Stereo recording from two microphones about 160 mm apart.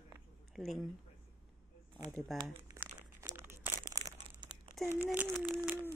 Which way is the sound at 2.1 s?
5° left (ahead or behind).